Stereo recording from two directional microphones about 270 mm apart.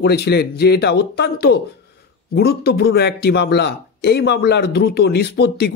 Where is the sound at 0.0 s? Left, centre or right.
Left.